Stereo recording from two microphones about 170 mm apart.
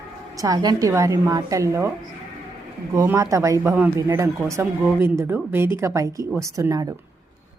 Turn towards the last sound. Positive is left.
turn(degrees=-20)  # may be behind; listen again after turning